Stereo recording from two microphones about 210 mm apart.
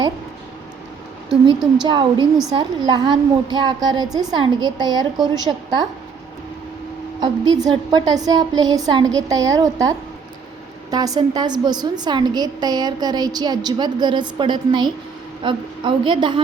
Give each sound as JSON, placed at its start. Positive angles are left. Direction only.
{"t": 1.5, "sound": "a woman's voice", "side_deg": -20}
{"t": 7.2, "sound": "a woman's voice", "side_deg": -20}
{"t": 10.9, "sound": "a woman's voice", "side_deg": -20}